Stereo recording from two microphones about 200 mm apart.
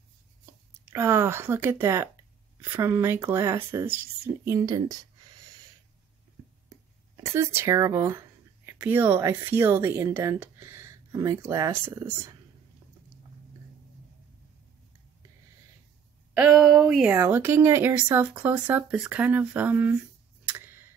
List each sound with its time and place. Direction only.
0.8 s speech: 10° right (ahead or behind)
7.2 s speech: 15° right (ahead or behind)
16.3 s speech: 5° right (ahead or behind)
17.1 s speech: 10° right (ahead or behind)
20.4 s tick: 10° right (ahead or behind)